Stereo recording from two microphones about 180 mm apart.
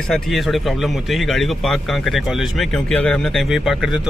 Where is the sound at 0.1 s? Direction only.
Centre (ahead or behind).